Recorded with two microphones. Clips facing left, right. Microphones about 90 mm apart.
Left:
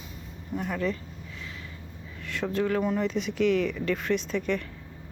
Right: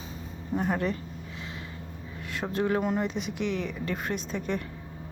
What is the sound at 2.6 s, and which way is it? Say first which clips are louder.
Speech: right 1 dB; 25° right (ahead or behind).